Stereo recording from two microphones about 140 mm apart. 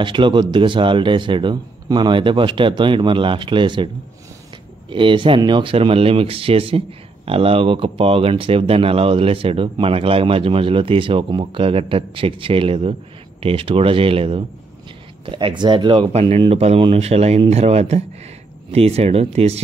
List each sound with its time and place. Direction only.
0.0 s speech: 35° right (ahead or behind)
16.1 s speech: 45° right (ahead or behind)